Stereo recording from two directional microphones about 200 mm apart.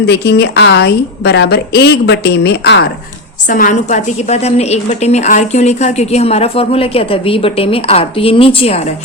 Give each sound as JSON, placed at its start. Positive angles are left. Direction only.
{"t": 0.0, "sound": "a woman's voice", "side_deg": 55}
{"t": 3.5, "sound": "a woman's voice", "side_deg": 40}